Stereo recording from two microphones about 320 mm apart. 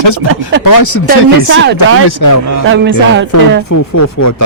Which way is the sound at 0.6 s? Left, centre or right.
Left.